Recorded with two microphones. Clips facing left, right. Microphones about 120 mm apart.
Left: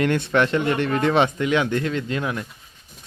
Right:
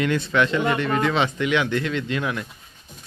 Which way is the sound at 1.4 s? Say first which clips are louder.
Left 1 dB; 40° left (ahead or behind).